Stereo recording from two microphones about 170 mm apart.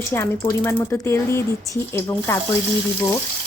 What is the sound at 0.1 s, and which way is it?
Speech, 15° left (ahead or behind).